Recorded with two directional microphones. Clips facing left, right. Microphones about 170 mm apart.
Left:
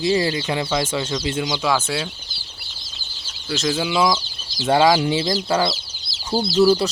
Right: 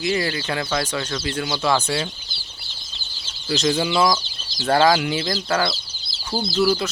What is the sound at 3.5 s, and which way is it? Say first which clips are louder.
Speech: right 1 dB; centre (ahead or behind).